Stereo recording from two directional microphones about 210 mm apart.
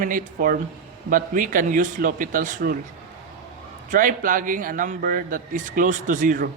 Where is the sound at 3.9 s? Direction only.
40° right (ahead or behind).